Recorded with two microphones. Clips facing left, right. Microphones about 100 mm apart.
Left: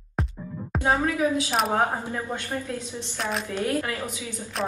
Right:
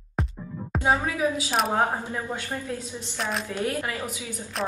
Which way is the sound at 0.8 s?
15° right (ahead or behind).